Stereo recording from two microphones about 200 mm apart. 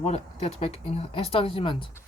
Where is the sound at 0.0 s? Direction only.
30° left (ahead or behind).